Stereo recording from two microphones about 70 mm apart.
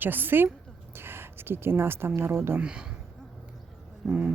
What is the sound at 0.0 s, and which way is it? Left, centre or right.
A woman's voice, right.